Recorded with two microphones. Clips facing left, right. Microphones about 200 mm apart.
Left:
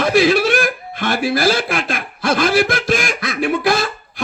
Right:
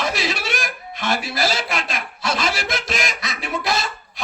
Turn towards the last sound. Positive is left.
turn(degrees=55)  # may be behind; listen again after turning